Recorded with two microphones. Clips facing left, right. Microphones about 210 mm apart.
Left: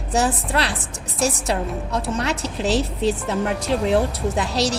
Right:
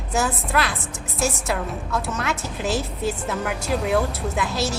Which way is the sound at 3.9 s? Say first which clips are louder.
Left 3 dB; 30° left (ahead or behind).